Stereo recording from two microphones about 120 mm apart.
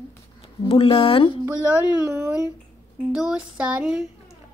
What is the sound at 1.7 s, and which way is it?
Speech, 20° right (ahead or behind).